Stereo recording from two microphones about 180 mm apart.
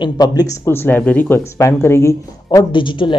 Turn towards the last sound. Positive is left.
turn(degrees=25)  # may be behind; listen again after turning